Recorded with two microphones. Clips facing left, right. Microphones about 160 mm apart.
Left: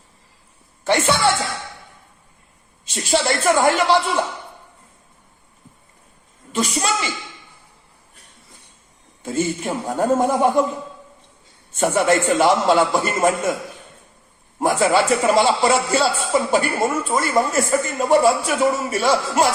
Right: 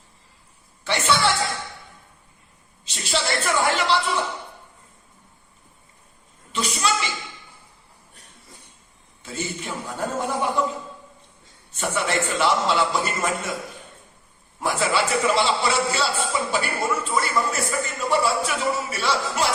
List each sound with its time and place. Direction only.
0.9 s a man's voice: 50° left (ahead or behind)
2.8 s a man's voice: 50° left (ahead or behind)
6.5 s a man's voice: 45° left (ahead or behind)
9.2 s a man's voice: 45° left (ahead or behind)
11.7 s a man's voice: 45° left (ahead or behind)
14.6 s a man's voice: 50° left (ahead or behind)